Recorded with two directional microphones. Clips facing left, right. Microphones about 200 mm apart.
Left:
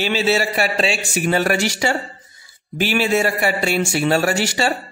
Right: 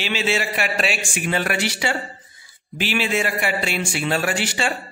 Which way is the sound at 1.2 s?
45° left (ahead or behind).